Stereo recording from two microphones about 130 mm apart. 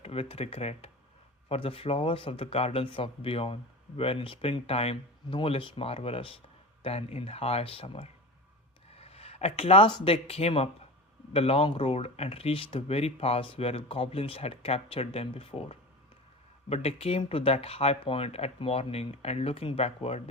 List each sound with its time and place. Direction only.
0.0 s speech: 45° left (ahead or behind)